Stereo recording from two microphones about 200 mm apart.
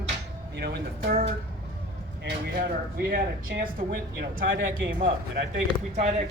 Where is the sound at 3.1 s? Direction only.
45° right (ahead or behind).